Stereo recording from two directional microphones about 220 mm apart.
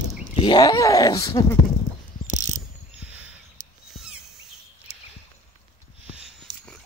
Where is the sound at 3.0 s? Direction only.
5° right (ahead or behind).